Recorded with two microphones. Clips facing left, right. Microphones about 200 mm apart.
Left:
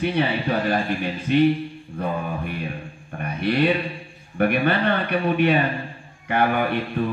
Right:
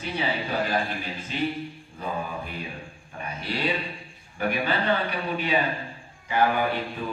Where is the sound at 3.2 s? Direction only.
60° left (ahead or behind).